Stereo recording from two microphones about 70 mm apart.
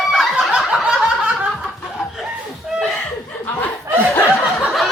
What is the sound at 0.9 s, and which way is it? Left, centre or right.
Snicker, centre.